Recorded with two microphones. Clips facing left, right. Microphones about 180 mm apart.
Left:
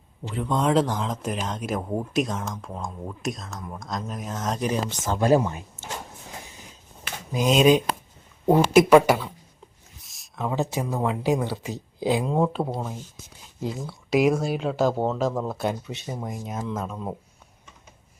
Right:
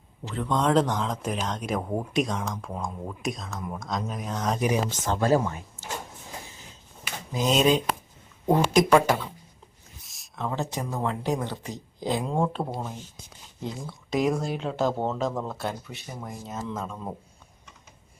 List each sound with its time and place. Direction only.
0.3 s speech: 10° left (ahead or behind)
5.2 s speech: 15° left (ahead or behind)
7.3 s speech: 10° left (ahead or behind)
10.0 s a sound: centre (ahead or behind)
10.4 s speech: 10° left (ahead or behind)